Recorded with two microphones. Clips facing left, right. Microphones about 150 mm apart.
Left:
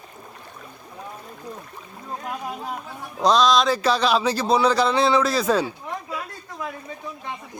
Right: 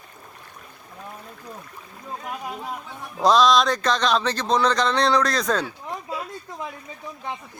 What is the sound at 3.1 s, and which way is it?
Speech, centre (ahead or behind).